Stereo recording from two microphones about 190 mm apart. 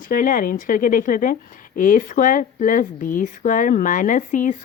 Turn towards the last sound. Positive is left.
turn(degrees=45)  # may be behind; listen again after turning